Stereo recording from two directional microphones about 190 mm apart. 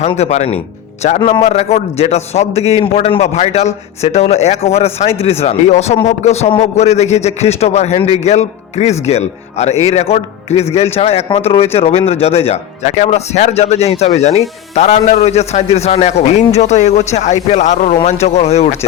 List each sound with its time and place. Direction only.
0.0 s a man's voice: 35° left (ahead or behind)